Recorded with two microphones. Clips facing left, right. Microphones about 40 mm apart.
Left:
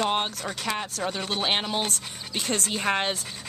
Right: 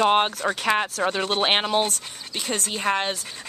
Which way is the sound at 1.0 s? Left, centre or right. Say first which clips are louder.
Right 5 dB; centre.